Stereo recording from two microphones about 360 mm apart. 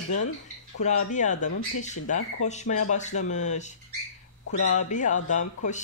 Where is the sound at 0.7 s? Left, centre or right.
Centre.